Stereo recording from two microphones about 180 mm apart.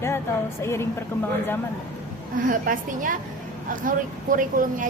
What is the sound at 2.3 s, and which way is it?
A woman's voice, 50° right (ahead or behind).